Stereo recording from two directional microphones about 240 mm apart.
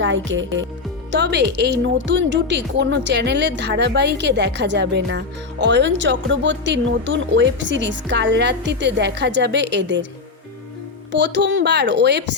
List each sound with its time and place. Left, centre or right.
0.0 s speech: right
11.1 s speech: right